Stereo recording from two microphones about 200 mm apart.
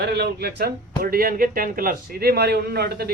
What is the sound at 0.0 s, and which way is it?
Speech, 55° right (ahead or behind).